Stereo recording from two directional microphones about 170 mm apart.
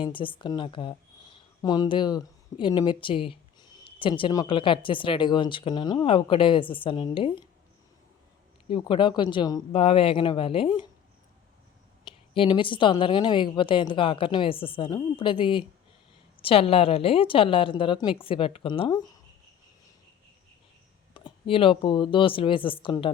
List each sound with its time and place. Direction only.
0.0 s speech: 30° left (ahead or behind)
8.7 s a woman's voice: 30° left (ahead or behind)
12.0 s a woman's voice: 30° left (ahead or behind)
21.1 s speech: 30° left (ahead or behind)